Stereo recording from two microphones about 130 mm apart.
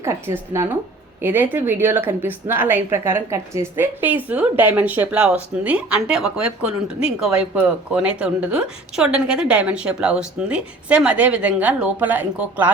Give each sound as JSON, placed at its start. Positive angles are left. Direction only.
{"t": 0.0, "sound": "a woman's voice", "side_deg": -20}